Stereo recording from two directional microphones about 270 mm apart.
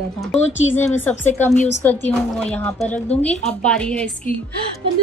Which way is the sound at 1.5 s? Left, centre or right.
Left.